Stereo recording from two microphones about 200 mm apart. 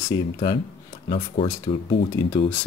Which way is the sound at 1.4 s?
25° left (ahead or behind).